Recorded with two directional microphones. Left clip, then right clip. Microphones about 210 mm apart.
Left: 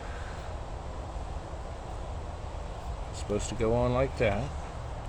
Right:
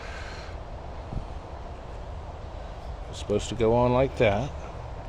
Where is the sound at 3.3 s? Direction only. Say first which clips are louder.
Right 6 dB; 40° right (ahead or behind).